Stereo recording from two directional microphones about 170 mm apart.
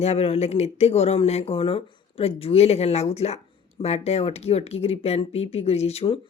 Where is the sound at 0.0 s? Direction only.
40° left (ahead or behind).